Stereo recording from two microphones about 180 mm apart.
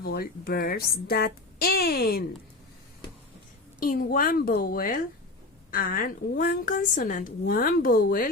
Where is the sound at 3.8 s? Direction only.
50° left (ahead or behind).